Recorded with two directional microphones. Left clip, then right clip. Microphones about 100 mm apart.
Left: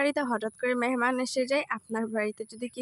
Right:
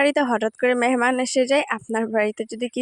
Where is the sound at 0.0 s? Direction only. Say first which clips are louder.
Right 8 dB; 50° right (ahead or behind).